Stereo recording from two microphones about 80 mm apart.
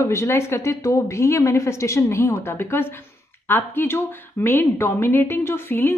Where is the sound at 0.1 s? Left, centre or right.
Left.